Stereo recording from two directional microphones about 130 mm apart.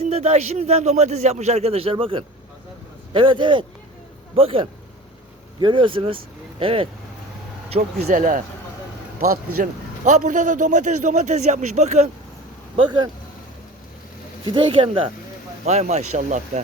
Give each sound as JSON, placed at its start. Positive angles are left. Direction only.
{"t": 0.0, "sound": "a man's voice", "side_deg": -55}
{"t": 7.7, "sound": "a man's voice", "side_deg": -70}
{"t": 10.1, "sound": "a man's voice", "side_deg": -70}
{"t": 12.7, "sound": "a man's voice", "side_deg": -40}
{"t": 14.4, "sound": "speech", "side_deg": -40}
{"t": 15.6, "sound": "a man's voice", "side_deg": -60}